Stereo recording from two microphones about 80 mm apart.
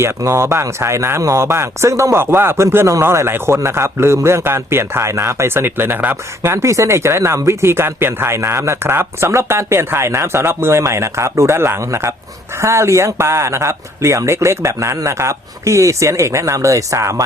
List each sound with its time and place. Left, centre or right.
0.2 s speech: right
6.5 s speech: right